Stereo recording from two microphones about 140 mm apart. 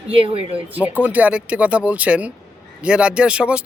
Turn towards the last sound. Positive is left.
turn(degrees=-10)  # may be behind; listen again after turning